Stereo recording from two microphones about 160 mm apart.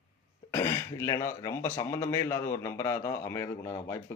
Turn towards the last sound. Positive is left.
turn(degrees=20)  # may be behind; listen again after turning